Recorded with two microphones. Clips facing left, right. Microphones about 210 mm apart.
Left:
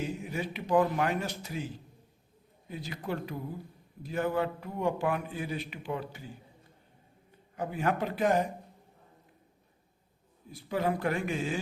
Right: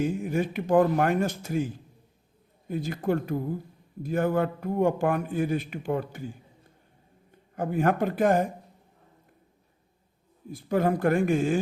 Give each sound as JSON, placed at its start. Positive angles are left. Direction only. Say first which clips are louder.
{"t": 0.0, "sound": "a man's voice", "louder": "right 8 dB", "side_deg": -50}
{"t": 7.5, "sound": "a man's voice", "louder": "right 6 dB", "side_deg": -50}
{"t": 10.5, "sound": "a man's voice", "louder": "right 6 dB", "side_deg": -50}